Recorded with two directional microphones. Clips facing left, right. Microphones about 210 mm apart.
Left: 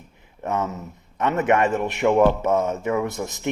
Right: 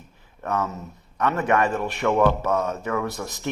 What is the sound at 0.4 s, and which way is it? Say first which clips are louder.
A man's voice: left 1 dB; 20° left (ahead or behind).